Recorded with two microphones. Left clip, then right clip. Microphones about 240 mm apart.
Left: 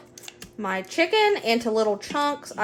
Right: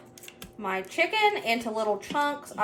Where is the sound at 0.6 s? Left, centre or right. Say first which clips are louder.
Left 3 dB; left.